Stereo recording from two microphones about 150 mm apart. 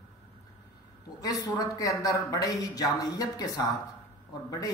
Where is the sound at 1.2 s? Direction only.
25° left (ahead or behind).